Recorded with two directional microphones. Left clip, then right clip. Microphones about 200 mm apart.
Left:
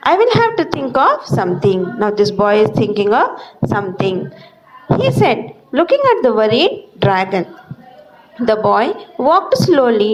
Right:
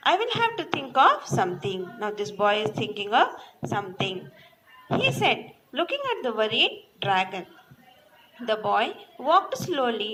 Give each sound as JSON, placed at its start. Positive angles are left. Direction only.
{"t": 0.0, "sound": "a woman's voice", "side_deg": 50}
{"t": 8.6, "sound": "a woman's voice", "side_deg": 55}